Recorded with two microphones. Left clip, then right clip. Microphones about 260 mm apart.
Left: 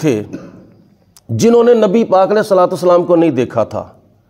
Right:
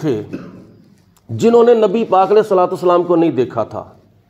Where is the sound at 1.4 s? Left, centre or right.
Left.